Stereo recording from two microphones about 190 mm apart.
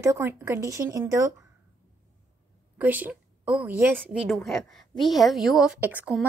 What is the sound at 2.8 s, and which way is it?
A woman's voice, 10° right (ahead or behind).